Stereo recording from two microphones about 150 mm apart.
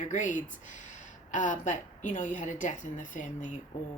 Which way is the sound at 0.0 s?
55° left (ahead or behind).